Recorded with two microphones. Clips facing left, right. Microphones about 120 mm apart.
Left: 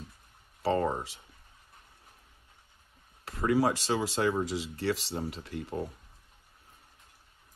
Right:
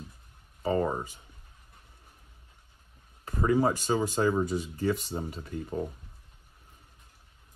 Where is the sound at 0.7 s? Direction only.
10° right (ahead or behind).